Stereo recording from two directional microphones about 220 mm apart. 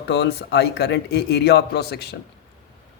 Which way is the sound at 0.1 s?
50° left (ahead or behind).